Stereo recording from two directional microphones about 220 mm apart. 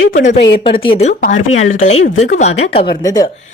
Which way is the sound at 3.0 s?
15° left (ahead or behind).